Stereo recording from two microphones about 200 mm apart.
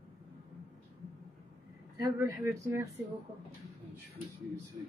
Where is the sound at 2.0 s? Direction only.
15° right (ahead or behind).